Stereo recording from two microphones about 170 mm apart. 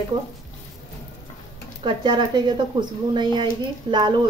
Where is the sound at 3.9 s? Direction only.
25° right (ahead or behind).